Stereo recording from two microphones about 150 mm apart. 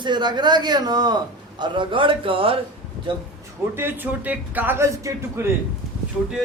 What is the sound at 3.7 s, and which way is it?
A man's voice, 15° right (ahead or behind).